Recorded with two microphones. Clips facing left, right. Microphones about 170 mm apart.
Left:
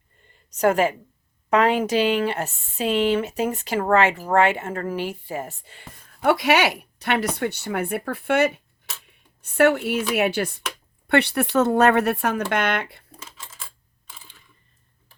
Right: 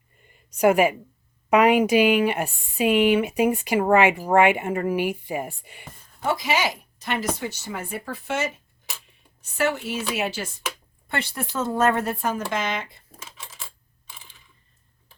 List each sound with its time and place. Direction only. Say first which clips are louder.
0.3 s a sound: right 1 dB; 10° right (ahead or behind)
1.5 s speech: right 2 dB; 10° right (ahead or behind)
6.2 s speech: left 5 dB; 65° left (ahead or behind)